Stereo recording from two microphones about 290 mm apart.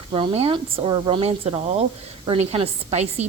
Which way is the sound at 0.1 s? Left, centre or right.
Centre.